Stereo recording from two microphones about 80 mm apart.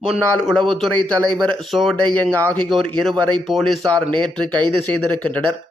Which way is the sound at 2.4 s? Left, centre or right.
Left.